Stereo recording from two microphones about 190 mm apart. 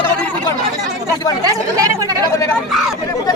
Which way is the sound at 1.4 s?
20° right (ahead or behind).